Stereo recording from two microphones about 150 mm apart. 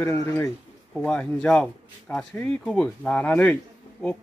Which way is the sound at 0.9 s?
5° left (ahead or behind).